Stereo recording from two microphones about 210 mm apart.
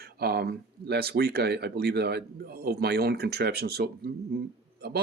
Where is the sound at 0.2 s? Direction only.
50° right (ahead or behind).